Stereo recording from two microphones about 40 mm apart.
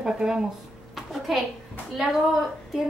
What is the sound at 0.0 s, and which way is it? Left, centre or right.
Speech, centre.